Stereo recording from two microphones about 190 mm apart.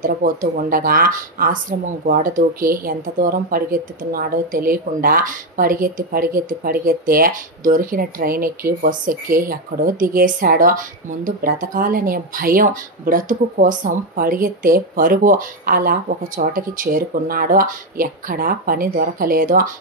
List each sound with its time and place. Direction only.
0.0 s speech: 45° right (ahead or behind)